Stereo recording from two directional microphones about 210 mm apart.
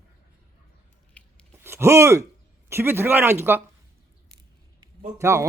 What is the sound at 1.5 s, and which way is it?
Speech, 10° right (ahead or behind).